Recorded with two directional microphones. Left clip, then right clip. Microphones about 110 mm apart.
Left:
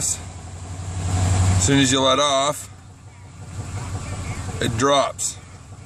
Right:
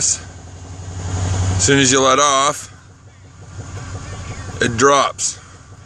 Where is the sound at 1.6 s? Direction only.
15° right (ahead or behind).